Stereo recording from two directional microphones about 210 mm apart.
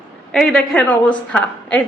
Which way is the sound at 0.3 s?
5° left (ahead or behind).